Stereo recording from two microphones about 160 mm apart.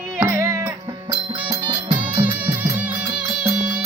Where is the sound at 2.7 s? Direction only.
10° right (ahead or behind).